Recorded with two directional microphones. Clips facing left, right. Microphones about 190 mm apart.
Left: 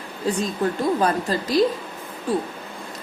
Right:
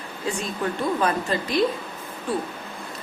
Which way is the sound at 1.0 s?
35° left (ahead or behind).